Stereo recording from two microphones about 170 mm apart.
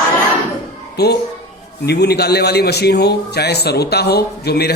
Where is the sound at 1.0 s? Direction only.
70° left (ahead or behind).